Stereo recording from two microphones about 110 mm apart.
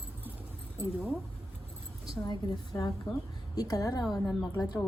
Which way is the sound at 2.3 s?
40° left (ahead or behind).